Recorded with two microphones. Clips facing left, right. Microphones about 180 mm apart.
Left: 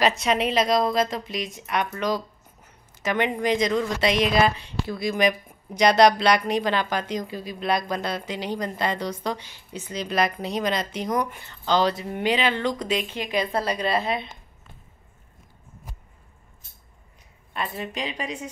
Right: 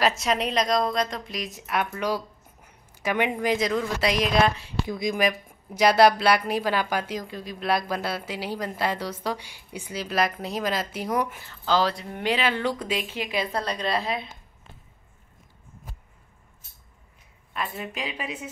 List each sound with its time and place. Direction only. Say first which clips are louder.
0.0 s speech: left 2 dB; centre (ahead or behind)
4.8 s speech: even; 15° right (ahead or behind)
5.8 s speech: left 1 dB; 5° right (ahead or behind)
17.6 s speech: left 2 dB; centre (ahead or behind)